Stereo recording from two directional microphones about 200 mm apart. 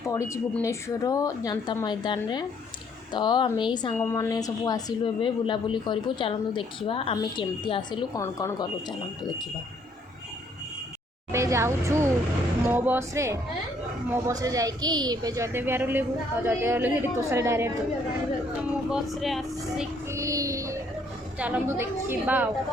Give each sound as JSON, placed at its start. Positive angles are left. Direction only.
{"t": 0.1, "sound": "a woman's voice", "side_deg": 15}
{"t": 3.9, "sound": "speech", "side_deg": 10}
{"t": 11.3, "sound": "a woman's voice", "side_deg": -15}
{"t": 18.9, "sound": "speech", "side_deg": 0}
{"t": 20.1, "sound": "music", "side_deg": -15}
{"t": 21.3, "sound": "a woman's voice", "side_deg": -5}